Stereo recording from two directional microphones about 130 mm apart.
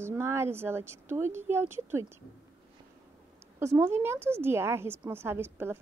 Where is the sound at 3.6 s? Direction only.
20° right (ahead or behind).